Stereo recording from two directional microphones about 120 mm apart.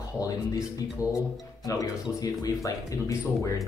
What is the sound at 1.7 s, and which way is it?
Speech, 30° left (ahead or behind).